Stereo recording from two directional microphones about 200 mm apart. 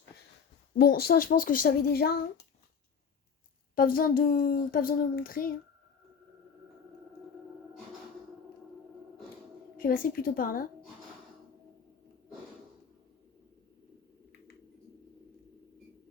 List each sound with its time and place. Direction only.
0.7 s a child's voice: 50° left (ahead or behind)
3.8 s a child's voice: 45° left (ahead or behind)
9.7 s a child's voice: 45° left (ahead or behind)